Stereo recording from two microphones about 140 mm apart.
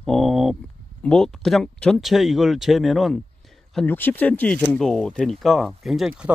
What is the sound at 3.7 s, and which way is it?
Speech, 10° left (ahead or behind).